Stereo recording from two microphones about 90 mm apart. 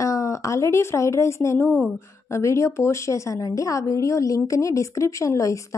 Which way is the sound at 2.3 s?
35° left (ahead or behind).